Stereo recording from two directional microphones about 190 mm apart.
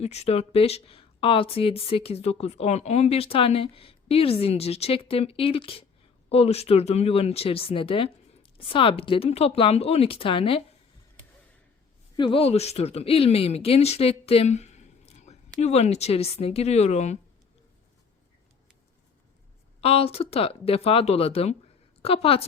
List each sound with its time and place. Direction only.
0.0 s speech: 35° left (ahead or behind)
12.1 s speech: 25° left (ahead or behind)
19.8 s speech: 30° left (ahead or behind)